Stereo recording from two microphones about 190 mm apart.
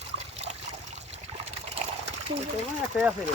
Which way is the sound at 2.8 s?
5° right (ahead or behind).